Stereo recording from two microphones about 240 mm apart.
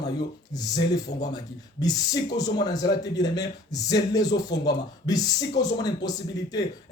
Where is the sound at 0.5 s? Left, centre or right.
Centre.